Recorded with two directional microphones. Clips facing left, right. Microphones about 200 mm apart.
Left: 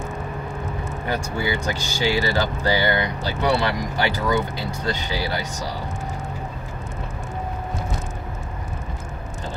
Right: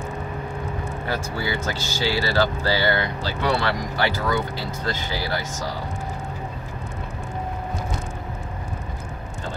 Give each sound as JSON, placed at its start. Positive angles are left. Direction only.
{"t": 1.0, "sound": "speech", "side_deg": 15}